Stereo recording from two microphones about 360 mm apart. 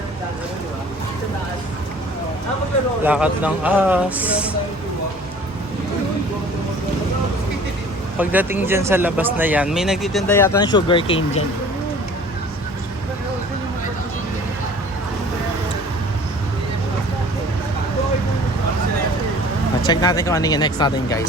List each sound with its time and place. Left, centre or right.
3.0 s speech: centre
8.2 s speech: centre
19.9 s speech: centre